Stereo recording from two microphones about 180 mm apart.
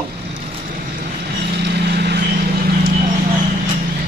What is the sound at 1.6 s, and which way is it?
Vehicle, 65° right (ahead or behind).